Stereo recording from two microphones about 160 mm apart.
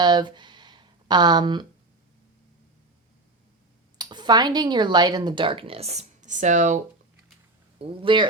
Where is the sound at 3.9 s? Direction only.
25° right (ahead or behind); by 6.8 s 50° right (ahead or behind).